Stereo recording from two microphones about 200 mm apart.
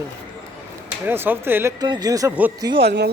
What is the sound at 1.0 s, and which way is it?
Speech, 10° right (ahead or behind).